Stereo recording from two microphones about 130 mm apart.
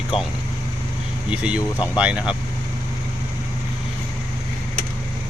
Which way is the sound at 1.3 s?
10° right (ahead or behind).